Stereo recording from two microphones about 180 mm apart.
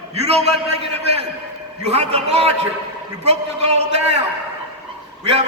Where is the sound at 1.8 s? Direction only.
35° right (ahead or behind).